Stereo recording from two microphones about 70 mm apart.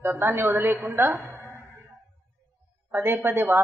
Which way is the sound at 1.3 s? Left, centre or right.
Right.